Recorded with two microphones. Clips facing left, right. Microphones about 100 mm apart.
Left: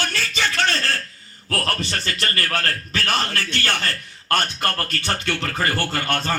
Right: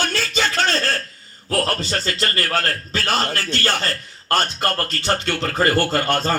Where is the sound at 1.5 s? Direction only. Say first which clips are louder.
Right 3 dB; 25° right (ahead or behind).